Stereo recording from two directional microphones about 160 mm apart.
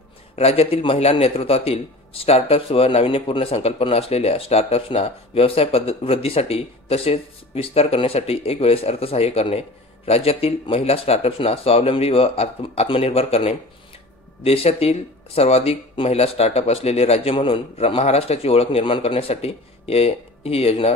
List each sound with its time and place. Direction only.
0.4 s a man's voice: 40° left (ahead or behind)